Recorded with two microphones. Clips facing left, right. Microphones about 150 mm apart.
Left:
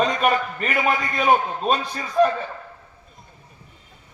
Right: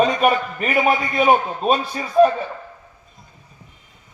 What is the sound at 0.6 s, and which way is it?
Speech, 20° right (ahead or behind).